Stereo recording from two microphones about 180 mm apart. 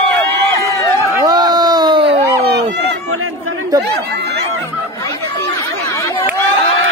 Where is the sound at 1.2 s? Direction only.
20° right (ahead or behind).